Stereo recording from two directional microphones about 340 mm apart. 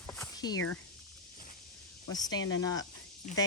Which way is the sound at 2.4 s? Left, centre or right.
Left.